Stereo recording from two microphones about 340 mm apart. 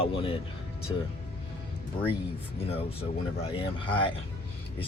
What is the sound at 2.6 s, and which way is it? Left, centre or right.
Speech, centre.